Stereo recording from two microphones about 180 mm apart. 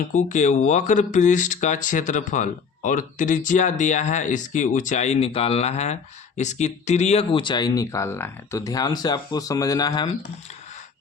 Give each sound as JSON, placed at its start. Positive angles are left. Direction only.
{"t": 0.1, "sound": "speech", "side_deg": 45}